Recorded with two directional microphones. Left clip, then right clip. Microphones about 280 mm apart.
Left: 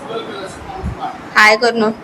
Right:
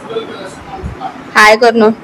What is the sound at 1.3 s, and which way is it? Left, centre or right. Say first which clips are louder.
Speech: right 4 dB; centre.